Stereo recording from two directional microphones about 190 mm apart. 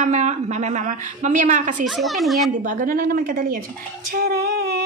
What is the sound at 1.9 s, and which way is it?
Speech, centre (ahead or behind).